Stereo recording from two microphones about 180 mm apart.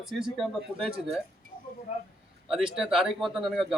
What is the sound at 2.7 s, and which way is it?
A man's voice, centre (ahead or behind).